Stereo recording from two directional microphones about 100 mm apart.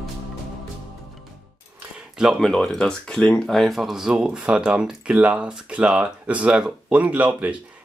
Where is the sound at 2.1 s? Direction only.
Centre (ahead or behind).